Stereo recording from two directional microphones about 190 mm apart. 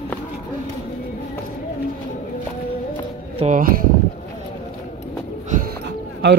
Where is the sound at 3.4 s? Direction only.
40° right (ahead or behind).